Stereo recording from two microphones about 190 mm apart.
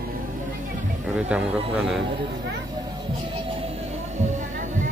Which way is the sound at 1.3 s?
5° right (ahead or behind).